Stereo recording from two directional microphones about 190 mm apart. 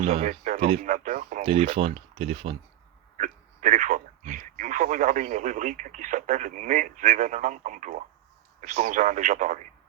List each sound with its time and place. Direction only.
0.0 s speech: 45° right (ahead or behind)
1.5 s speech: 30° right (ahead or behind)
3.2 s speech: 40° right (ahead or behind)